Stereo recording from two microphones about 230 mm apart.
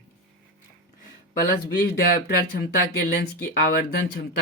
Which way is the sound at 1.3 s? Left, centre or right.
Left.